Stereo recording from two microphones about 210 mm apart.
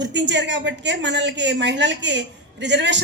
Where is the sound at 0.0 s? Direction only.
55° right (ahead or behind).